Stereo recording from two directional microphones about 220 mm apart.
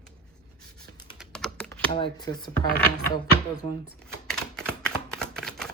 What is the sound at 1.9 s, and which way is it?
Speech, 20° left (ahead or behind).